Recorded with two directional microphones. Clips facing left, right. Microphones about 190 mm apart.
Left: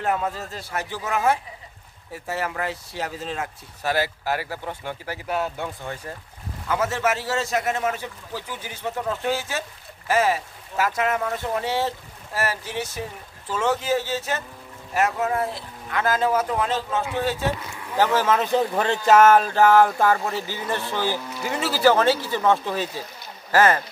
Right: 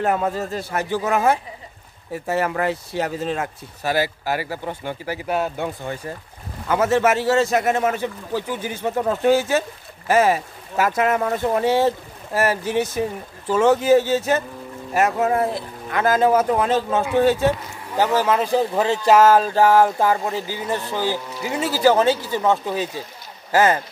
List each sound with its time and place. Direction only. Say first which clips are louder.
0.0 s speech: right 4 dB; 50° right (ahead or behind)
3.8 s speech: right 2 dB; 5° right (ahead or behind)
5.9 s speech: right 4 dB; 5° right (ahead or behind)
6.7 s speech: right 6 dB; 55° right (ahead or behind)
17.9 s speech: right 2 dB; 15° right (ahead or behind)
18.6 s speech: right 3 dB; 5° right (ahead or behind); by 23.8 s 20° right (ahead or behind)